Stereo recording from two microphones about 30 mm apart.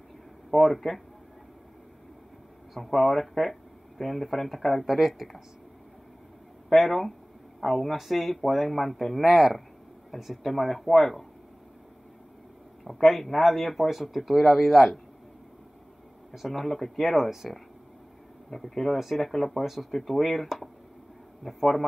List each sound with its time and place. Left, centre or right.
0.5 s speech: centre
2.7 s speech: centre
4.8 s speech: centre
6.7 s speech: centre
12.8 s speech: centre
16.5 s speech: centre
17.3 s speech: centre
18.5 s speech: centre
18.9 s speech: centre
19.2 s speech: centre
19.6 s speech: centre